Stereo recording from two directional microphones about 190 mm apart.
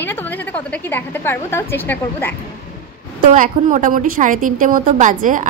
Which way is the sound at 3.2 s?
45° right (ahead or behind).